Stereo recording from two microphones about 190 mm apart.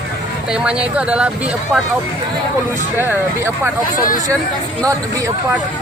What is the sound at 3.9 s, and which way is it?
Speech, 45° left (ahead or behind).